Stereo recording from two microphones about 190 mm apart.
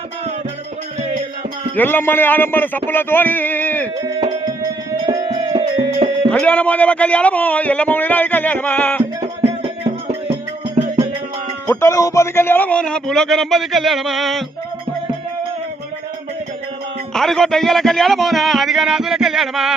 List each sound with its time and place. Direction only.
1.7 s a man's voice: 10° left (ahead or behind)
4.0 s music: 20° right (ahead or behind)
6.3 s a man's voice: 5° left (ahead or behind)
10.8 s music: 30° right (ahead or behind)
11.6 s a man's voice: 15° left (ahead or behind)
17.2 s a man's voice: centre (ahead or behind)